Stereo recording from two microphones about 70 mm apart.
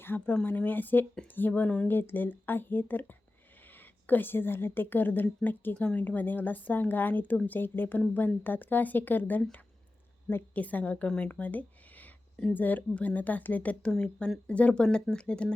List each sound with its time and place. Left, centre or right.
0.0 s a woman's voice: left
10.5 s a woman's voice: left
13.9 s speech: centre